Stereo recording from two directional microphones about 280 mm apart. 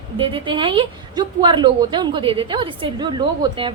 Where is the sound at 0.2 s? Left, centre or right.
Centre.